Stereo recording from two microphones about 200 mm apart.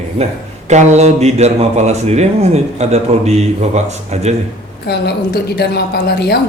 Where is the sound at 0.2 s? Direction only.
30° right (ahead or behind).